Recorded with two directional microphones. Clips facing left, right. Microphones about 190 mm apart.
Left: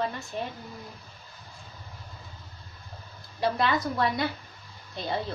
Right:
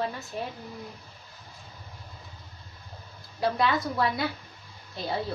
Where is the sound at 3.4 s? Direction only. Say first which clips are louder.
Even; centre (ahead or behind).